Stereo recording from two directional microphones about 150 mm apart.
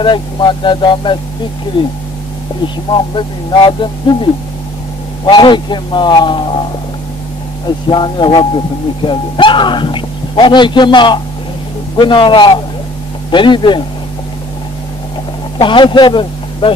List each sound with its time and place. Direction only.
0.0 s speech: 30° left (ahead or behind)
3.2 s speech: 30° left (ahead or behind)
7.9 s speech: 30° left (ahead or behind)
15.6 s speech: 30° left (ahead or behind)